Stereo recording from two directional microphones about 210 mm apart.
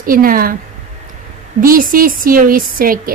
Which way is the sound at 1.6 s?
40° right (ahead or behind).